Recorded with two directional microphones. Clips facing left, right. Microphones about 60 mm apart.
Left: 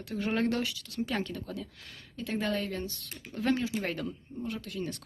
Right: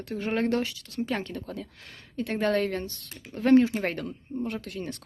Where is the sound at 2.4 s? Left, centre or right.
Right.